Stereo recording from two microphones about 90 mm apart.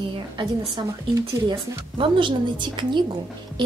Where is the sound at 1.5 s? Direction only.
70° right (ahead or behind).